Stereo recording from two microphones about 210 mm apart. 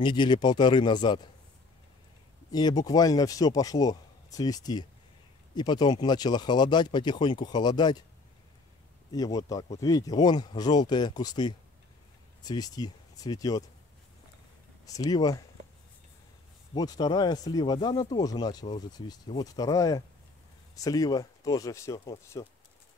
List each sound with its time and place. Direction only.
0.0 s speech: 20° left (ahead or behind)
2.5 s a man's voice: 20° left (ahead or behind)
9.1 s a man's voice: 15° left (ahead or behind)
14.9 s a man's voice: 20° left (ahead or behind)
16.7 s a man's voice: 20° left (ahead or behind)